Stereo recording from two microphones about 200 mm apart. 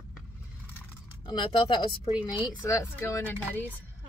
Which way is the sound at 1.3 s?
25° left (ahead or behind).